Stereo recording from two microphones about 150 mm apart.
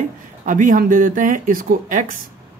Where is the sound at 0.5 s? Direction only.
60° right (ahead or behind).